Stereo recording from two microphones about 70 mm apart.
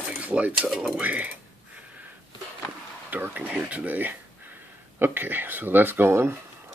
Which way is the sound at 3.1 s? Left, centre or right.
Right.